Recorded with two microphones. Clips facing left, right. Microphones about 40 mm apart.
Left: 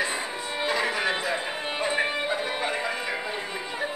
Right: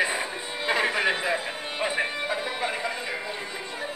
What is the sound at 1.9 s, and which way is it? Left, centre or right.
Music, centre.